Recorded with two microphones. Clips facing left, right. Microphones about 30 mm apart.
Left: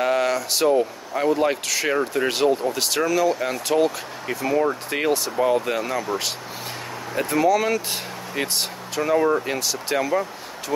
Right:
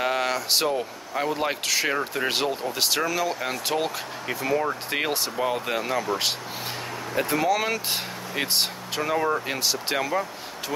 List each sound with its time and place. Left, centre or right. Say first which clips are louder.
0.0 s speech: left 4 dB; centre
7.2 s speech: left 4 dB; centre
9.6 s speech: even; right
9.9 s speech: left 6 dB; centre